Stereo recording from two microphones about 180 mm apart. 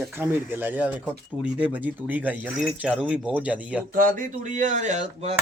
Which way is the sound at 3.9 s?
50° right (ahead or behind).